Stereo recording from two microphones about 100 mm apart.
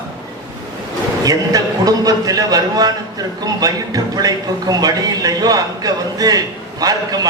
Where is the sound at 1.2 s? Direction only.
40° right (ahead or behind).